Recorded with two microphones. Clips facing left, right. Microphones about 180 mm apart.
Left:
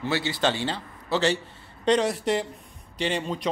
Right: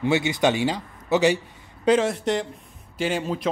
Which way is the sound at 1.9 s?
Centre (ahead or behind).